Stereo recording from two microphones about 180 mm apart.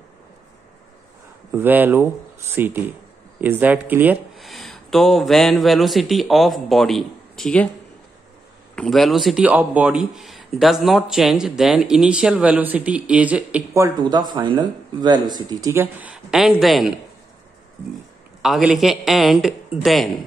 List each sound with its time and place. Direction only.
1.5 s speech: 10° right (ahead or behind)
4.4 s speech: centre (ahead or behind)
8.7 s speech: 5° left (ahead or behind)
18.4 s speech: 5° right (ahead or behind)